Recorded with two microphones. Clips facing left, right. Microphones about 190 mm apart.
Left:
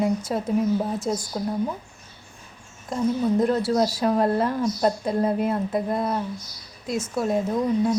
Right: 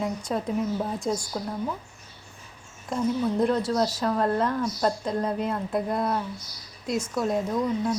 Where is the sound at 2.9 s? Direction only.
Centre (ahead or behind).